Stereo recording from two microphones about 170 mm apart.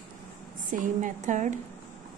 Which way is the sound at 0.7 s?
50° right (ahead or behind).